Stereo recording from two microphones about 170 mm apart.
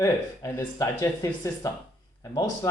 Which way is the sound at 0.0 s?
15° left (ahead or behind).